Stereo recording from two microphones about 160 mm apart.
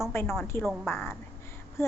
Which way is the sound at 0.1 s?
15° left (ahead or behind).